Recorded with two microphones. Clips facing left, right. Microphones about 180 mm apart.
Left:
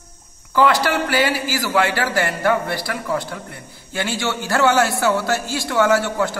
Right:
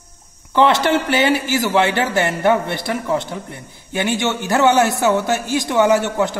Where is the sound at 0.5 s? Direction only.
25° right (ahead or behind).